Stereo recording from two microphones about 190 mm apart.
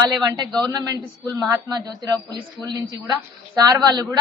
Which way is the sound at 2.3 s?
20° right (ahead or behind).